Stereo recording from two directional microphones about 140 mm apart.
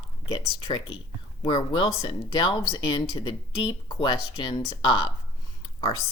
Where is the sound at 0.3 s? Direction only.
30° left (ahead or behind).